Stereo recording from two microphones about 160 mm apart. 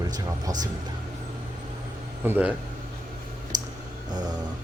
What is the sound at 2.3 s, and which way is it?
Speech, 10° right (ahead or behind).